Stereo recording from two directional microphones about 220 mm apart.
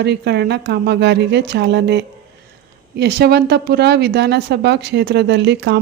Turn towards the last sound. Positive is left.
turn(degrees=-50)  # may be behind; listen again after turning